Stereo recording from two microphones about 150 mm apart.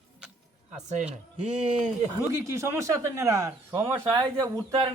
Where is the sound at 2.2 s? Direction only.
20° right (ahead or behind).